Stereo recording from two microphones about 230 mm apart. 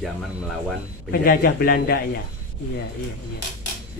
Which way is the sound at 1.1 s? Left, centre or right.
Left.